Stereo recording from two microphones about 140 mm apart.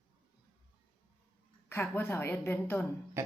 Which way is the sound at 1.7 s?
15° left (ahead or behind).